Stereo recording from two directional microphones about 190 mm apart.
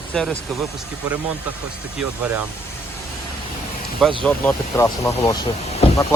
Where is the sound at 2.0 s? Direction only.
10° right (ahead or behind).